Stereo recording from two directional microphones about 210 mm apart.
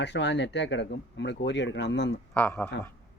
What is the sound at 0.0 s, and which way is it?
Speech, 55° left (ahead or behind).